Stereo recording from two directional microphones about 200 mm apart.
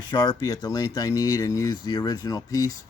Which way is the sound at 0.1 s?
20° left (ahead or behind).